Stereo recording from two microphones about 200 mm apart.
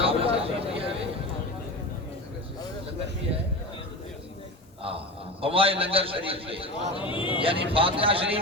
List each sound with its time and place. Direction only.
0.0 s a sound: 30° right (ahead or behind)
4.8 s a man's voice: 30° right (ahead or behind)
7.0 s speech: 25° left (ahead or behind)
7.4 s speech: 25° right (ahead or behind)